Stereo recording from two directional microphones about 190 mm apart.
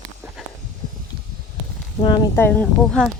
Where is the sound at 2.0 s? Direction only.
20° left (ahead or behind).